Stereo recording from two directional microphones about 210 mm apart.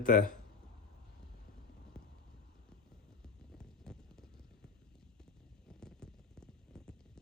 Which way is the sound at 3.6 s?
5° left (ahead or behind).